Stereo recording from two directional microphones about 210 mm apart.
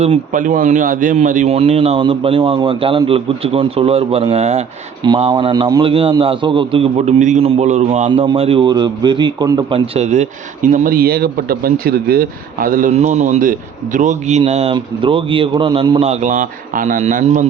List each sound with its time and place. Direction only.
0.0 s a man's voice: 35° right (ahead or behind)